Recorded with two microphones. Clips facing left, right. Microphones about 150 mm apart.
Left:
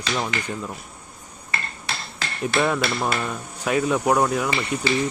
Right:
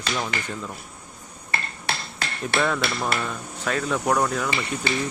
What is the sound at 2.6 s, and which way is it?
Speech, 15° left (ahead or behind).